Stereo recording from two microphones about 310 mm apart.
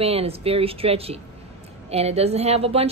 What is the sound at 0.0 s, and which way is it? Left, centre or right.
A woman's voice, centre.